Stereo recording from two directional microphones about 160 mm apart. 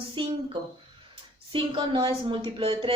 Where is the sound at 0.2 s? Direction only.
35° right (ahead or behind).